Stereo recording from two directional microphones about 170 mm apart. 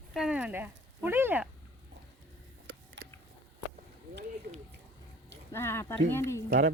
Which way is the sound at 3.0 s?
90° right.